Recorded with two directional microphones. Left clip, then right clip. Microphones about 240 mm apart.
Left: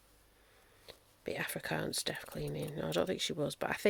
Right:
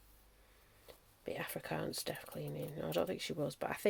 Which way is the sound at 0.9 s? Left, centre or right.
Left.